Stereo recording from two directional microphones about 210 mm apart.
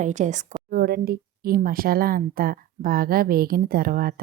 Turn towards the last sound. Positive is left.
turn(degrees=-45)  # may be behind; listen again after turning